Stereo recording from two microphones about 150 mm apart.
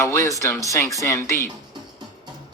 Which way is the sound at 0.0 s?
20° left (ahead or behind).